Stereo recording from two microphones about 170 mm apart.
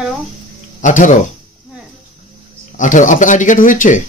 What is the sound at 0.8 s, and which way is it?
Speech, 50° left (ahead or behind).